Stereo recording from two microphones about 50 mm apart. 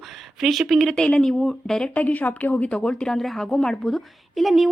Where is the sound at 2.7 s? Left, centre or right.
Centre.